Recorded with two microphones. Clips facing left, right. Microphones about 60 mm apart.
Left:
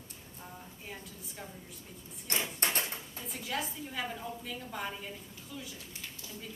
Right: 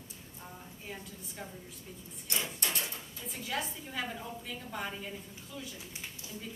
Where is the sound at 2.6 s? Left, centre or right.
Left.